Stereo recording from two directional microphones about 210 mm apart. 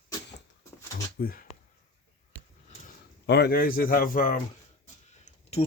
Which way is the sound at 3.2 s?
50° left (ahead or behind).